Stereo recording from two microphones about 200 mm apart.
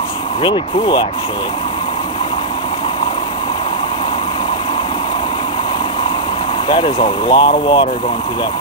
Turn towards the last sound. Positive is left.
turn(degrees=25)  # may be behind; listen again after turning